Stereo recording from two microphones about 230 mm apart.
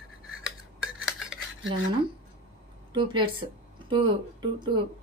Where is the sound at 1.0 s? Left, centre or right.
Centre.